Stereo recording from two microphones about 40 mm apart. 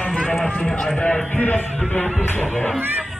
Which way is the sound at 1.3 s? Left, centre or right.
Left.